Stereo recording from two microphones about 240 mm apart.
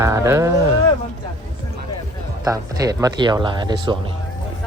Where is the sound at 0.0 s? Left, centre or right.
Centre.